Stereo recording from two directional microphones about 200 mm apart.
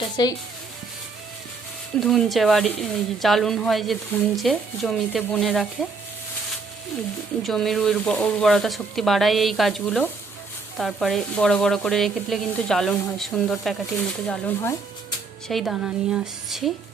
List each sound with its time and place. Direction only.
0.2 s speech: 20° left (ahead or behind)
2.0 s speech: centre (ahead or behind)
7.4 s speech: centre (ahead or behind)
14.3 s speech: 10° left (ahead or behind)
15.4 s speech: centre (ahead or behind)